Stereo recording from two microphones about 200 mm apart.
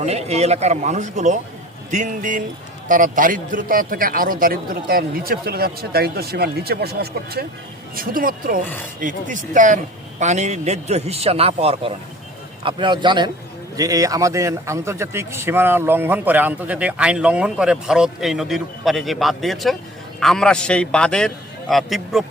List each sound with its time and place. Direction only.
0.0 s a man's voice: 35° right (ahead or behind); by 22.2 s centre (ahead or behind)